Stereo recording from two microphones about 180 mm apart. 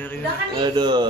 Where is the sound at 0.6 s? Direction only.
25° right (ahead or behind).